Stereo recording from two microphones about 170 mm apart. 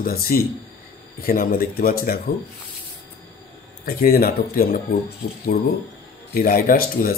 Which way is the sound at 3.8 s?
65° left (ahead or behind).